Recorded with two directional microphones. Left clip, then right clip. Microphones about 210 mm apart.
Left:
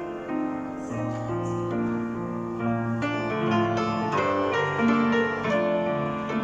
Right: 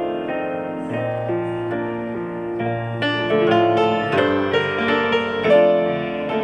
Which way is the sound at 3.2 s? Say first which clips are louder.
Right 11 dB; 50° right (ahead or behind).